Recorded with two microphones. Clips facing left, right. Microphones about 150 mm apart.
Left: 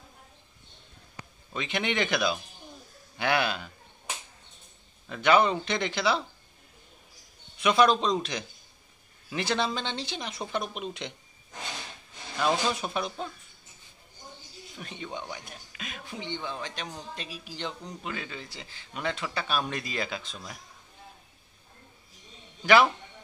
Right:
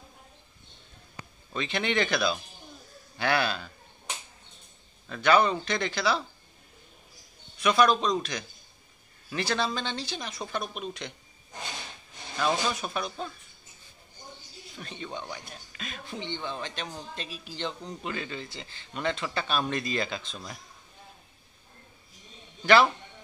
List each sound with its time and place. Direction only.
1.5 s a man's voice: 15° left (ahead or behind)
5.0 s speech: 15° left (ahead or behind)
7.6 s speech: 25° left (ahead or behind)
12.4 s a man's voice: 15° left (ahead or behind)
14.8 s a man's voice: 10° left (ahead or behind)